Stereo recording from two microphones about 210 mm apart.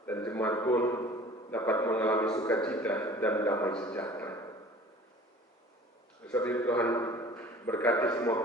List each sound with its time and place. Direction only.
0.2 s a man's voice: 10° left (ahead or behind)
3.9 s a sound: 10° left (ahead or behind)
6.3 s a man's voice: 10° left (ahead or behind)